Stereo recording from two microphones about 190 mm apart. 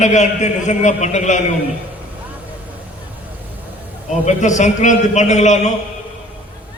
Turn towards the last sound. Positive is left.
turn(degrees=40)  # may be behind; listen again after turning